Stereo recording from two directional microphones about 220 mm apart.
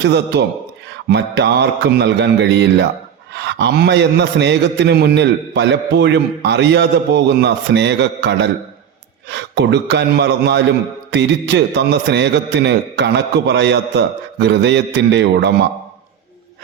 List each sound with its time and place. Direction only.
0.0 s a man's voice: 50° right (ahead or behind)